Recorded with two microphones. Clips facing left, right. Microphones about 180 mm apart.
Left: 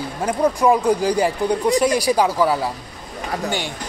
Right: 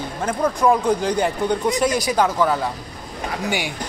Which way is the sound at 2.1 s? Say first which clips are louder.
Left 1 dB; 5° left (ahead or behind).